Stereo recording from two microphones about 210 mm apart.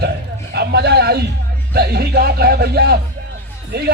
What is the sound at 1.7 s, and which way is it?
Speech, 50° right (ahead or behind).